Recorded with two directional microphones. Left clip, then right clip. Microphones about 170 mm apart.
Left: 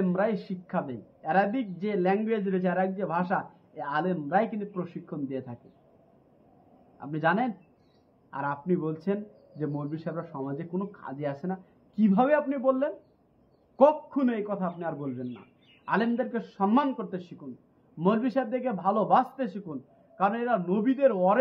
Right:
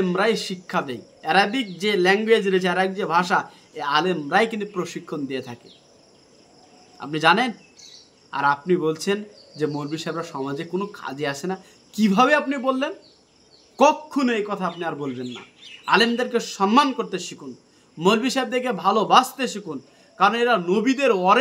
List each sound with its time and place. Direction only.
0.0 s speech: 20° right (ahead or behind)
7.0 s speech: 20° right (ahead or behind)